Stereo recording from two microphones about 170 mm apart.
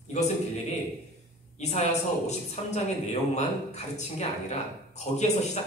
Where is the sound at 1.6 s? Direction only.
40° left (ahead or behind).